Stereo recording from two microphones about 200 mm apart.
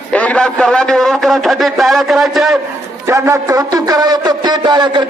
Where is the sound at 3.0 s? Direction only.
15° right (ahead or behind).